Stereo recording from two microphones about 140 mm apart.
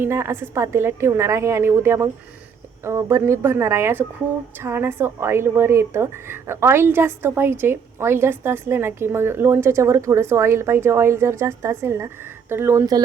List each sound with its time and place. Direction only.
0.0 s a woman's voice: 15° right (ahead or behind)